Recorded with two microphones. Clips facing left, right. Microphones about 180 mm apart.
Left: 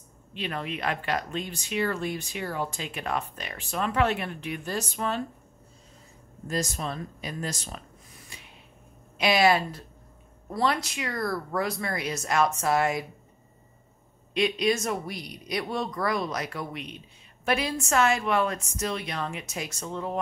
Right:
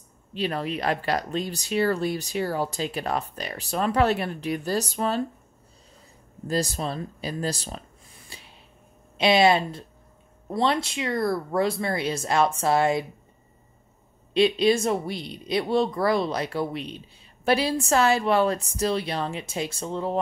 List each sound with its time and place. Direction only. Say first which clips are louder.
0.3 s speech: right 5 dB; 35° right (ahead or behind)
6.4 s speech: right 4 dB; 35° right (ahead or behind)
8.3 s a sound: right 3 dB; 30° right (ahead or behind)
9.2 s speech: right 3 dB; 25° right (ahead or behind)
14.3 s speech: right 5 dB; 30° right (ahead or behind)